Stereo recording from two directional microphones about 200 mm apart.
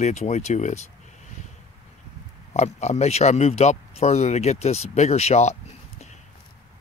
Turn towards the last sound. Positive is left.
turn(degrees=35)  # may be behind; listen again after turning